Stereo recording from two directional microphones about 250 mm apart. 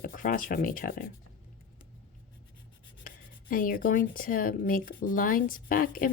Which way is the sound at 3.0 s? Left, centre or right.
Left.